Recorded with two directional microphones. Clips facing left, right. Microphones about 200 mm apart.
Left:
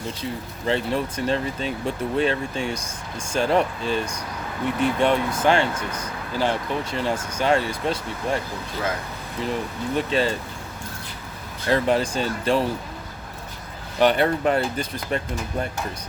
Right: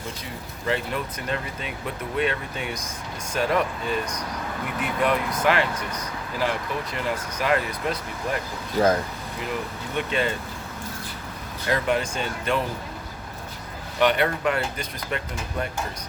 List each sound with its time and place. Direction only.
0.7 s speech: 30° left (ahead or behind)
8.8 s speech: 40° right (ahead or behind)
9.5 s speech: 30° left (ahead or behind)
11.7 s speech: 30° left (ahead or behind)
14.0 s speech: 35° left (ahead or behind)